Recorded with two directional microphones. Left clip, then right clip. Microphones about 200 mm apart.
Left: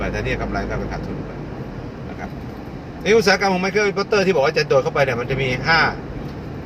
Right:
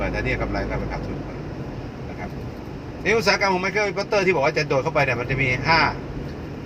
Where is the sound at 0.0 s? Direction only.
Centre (ahead or behind).